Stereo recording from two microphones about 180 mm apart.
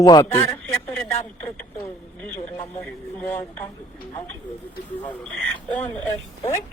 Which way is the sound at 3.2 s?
10° left (ahead or behind).